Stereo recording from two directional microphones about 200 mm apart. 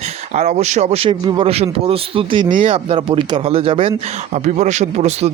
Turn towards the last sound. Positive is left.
turn(degrees=-35)  # may be behind; listen again after turning